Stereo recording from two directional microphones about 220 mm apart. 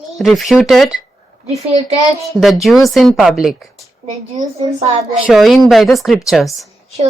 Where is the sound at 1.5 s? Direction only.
30° right (ahead or behind).